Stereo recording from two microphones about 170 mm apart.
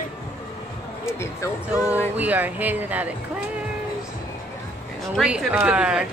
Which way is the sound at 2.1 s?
10° right (ahead or behind).